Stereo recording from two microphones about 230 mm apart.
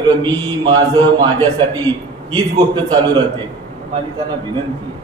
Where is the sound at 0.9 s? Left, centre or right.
Centre.